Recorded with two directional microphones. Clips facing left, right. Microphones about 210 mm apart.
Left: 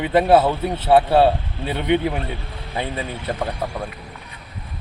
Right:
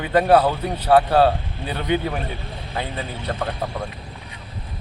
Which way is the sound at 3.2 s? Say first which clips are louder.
Even; 5° left (ahead or behind).